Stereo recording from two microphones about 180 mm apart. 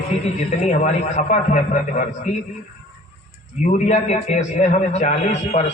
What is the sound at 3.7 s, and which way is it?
A man's voice, 40° left (ahead or behind).